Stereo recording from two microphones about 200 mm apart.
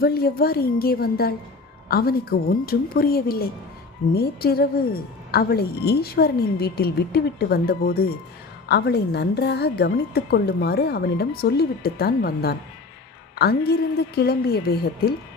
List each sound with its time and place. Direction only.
0.0 s speech: 50° left (ahead or behind)